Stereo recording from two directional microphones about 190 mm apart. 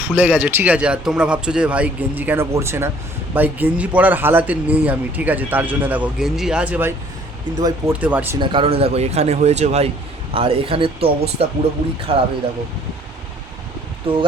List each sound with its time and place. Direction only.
0.1 s a man's voice: 10° right (ahead or behind)
7.5 s speech: 20° right (ahead or behind)
8.0 s a man's voice: 10° right (ahead or behind)
8.4 s speech: 25° right (ahead or behind)
14.1 s speech: 30° right (ahead or behind)